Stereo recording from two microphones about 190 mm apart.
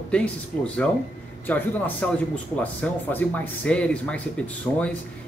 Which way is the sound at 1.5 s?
5° left (ahead or behind).